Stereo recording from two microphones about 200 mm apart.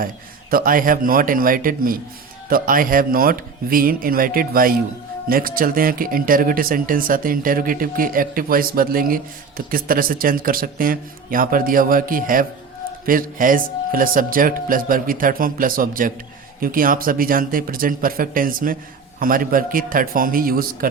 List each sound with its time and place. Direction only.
0.5 s speech: 45° right (ahead or behind)